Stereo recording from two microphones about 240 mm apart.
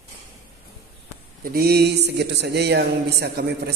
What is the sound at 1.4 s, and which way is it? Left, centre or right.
Speech, right.